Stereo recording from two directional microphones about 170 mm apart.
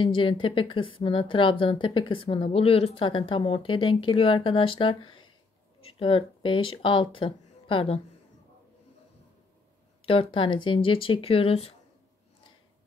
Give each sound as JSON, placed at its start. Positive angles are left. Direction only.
{"t": 0.0, "sound": "a woman's voice", "side_deg": 30}
{"t": 10.0, "sound": "a woman's voice", "side_deg": 35}